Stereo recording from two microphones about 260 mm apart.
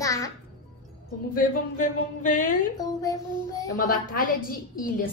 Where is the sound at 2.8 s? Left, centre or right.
Centre.